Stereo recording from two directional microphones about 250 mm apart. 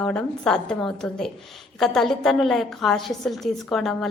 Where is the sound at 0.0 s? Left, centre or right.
Centre.